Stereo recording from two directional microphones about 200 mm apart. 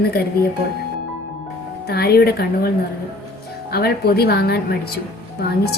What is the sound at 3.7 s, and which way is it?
A woman's voice, 50° left (ahead or behind).